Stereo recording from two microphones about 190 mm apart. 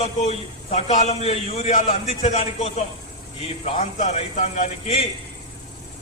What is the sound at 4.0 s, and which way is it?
A man's voice, 35° left (ahead or behind).